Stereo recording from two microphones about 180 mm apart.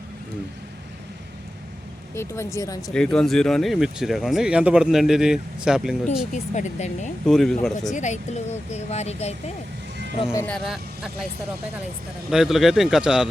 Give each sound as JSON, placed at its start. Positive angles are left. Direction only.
{"t": 2.1, "sound": "speech", "side_deg": 15}
{"t": 2.9, "sound": "speech", "side_deg": 5}
{"t": 6.1, "sound": "speech", "side_deg": 40}
{"t": 7.3, "sound": "speech", "side_deg": 0}
{"t": 7.9, "sound": "speech", "side_deg": 40}
{"t": 10.3, "sound": "speech", "side_deg": 10}
{"t": 10.7, "sound": "speech", "side_deg": -5}
{"t": 12.3, "sound": "speech", "side_deg": 0}